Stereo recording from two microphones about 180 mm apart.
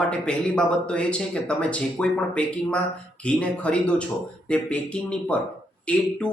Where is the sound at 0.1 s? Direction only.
5° left (ahead or behind).